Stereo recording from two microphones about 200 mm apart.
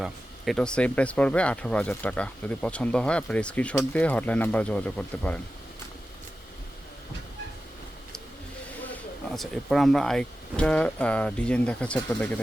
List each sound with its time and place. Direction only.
0.0 s speech: centre (ahead or behind)
8.9 s speech: centre (ahead or behind)